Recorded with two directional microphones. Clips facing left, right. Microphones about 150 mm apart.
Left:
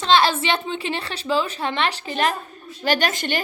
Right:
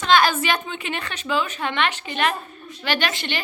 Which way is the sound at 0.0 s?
30° left (ahead or behind).